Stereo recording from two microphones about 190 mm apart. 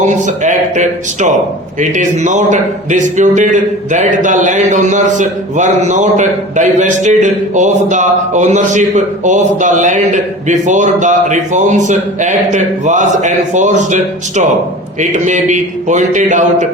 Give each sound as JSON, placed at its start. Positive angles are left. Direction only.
{"t": 0.0, "sound": "a man's voice", "side_deg": -40}